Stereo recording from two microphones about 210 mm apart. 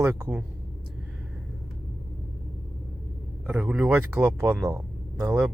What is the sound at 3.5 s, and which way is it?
Speech, 5° right (ahead or behind).